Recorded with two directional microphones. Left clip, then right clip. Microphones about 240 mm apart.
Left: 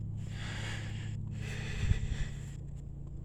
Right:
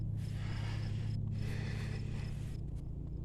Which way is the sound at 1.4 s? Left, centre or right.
Left.